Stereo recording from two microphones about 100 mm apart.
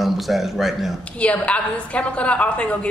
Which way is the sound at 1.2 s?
10° left (ahead or behind).